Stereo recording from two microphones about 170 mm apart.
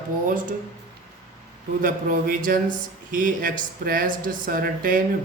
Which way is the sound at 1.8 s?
55° right (ahead or behind).